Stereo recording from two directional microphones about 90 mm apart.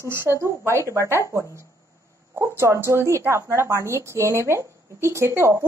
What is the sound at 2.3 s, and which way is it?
A woman's voice, 30° right (ahead or behind).